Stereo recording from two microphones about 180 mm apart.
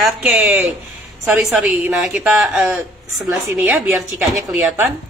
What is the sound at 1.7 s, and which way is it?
A woman's voice, 5° right (ahead or behind).